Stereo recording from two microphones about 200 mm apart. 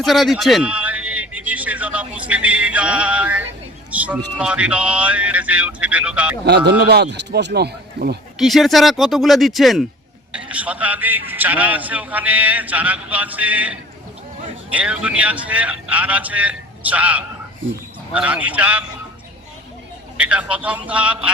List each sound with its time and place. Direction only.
0.0 s a man's voice: centre (ahead or behind)
3.9 s a sound: 5° right (ahead or behind)
4.4 s a man's voice: 5° right (ahead or behind)
6.7 s a man's voice: 55° right (ahead or behind)
8.4 s a man's voice: centre (ahead or behind)
17.6 s speech: 75° right (ahead or behind)
18.1 s a man's voice: 5° right (ahead or behind)
20.1 s a man's voice: 5° right (ahead or behind)